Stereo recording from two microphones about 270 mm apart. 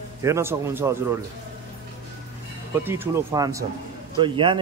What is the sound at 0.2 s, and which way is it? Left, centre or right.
Speech, centre.